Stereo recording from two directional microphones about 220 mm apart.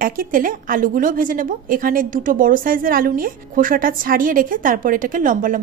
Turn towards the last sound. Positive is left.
turn(degrees=-40)  # may be behind; listen again after turning